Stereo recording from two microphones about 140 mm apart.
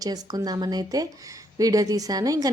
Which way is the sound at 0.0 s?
30° right (ahead or behind).